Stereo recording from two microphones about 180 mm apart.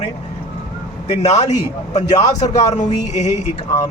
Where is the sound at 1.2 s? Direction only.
40° left (ahead or behind).